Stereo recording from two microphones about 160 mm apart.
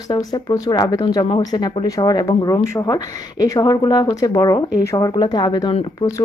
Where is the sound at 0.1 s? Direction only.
25° left (ahead or behind).